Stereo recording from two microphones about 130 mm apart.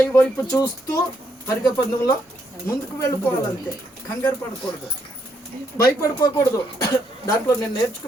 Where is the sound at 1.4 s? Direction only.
20° left (ahead or behind).